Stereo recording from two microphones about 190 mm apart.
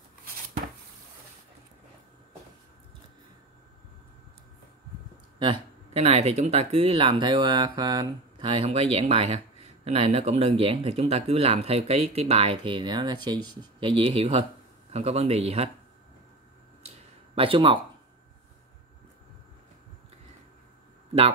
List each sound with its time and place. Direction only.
5.4 s speech: 30° right (ahead or behind)
17.4 s speech: 30° right (ahead or behind)